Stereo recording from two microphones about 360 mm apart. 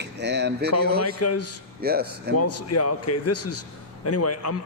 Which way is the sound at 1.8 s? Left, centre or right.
Right.